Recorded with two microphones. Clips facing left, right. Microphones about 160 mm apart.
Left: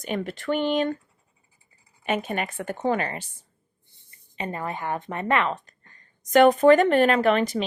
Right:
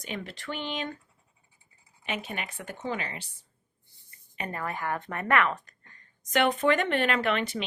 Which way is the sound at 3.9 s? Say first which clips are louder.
Left 4 dB; 25° left (ahead or behind).